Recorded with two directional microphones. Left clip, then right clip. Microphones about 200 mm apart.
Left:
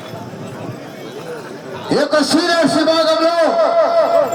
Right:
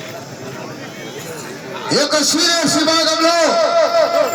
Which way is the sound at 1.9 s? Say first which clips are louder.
Left 1 dB; 45° left (ahead or behind).